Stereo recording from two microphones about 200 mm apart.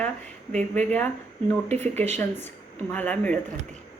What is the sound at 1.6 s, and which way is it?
Speech, 35° right (ahead or behind).